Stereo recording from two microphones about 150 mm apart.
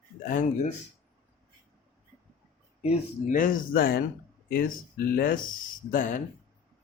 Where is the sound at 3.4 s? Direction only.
70° left (ahead or behind).